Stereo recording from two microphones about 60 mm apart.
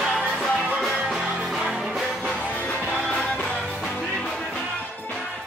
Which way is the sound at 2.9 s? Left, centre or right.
Centre.